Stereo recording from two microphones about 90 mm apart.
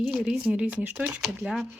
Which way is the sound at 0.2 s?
10° right (ahead or behind).